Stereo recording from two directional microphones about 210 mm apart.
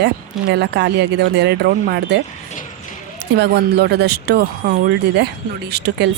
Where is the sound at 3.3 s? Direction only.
50° right (ahead or behind).